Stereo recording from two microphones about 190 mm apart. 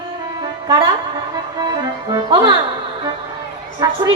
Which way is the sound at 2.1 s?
25° right (ahead or behind).